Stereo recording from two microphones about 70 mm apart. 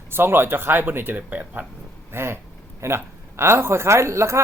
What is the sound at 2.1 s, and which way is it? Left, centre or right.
Speech, right.